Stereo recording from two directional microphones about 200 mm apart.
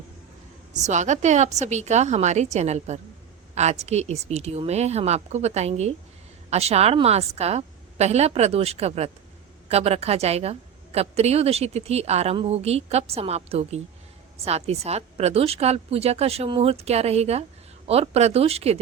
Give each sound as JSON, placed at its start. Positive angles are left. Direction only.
{"t": 0.7, "sound": "a woman's voice", "side_deg": -35}